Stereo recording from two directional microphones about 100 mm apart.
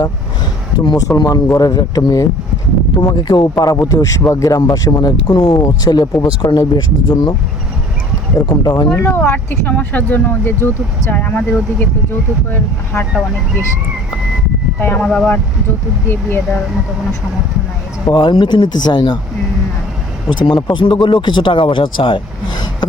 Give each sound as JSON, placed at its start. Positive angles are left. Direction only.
{"t": 0.9, "sound": "speech", "side_deg": 35}
{"t": 2.9, "sound": "speech", "side_deg": 50}
{"t": 8.4, "sound": "speech", "side_deg": 40}
{"t": 9.0, "sound": "speech", "side_deg": 20}
{"t": 14.8, "sound": "speech", "side_deg": 20}
{"t": 15.0, "sound": "speech", "side_deg": 5}
{"t": 18.1, "sound": "speech", "side_deg": 50}
{"t": 20.4, "sound": "speech", "side_deg": 60}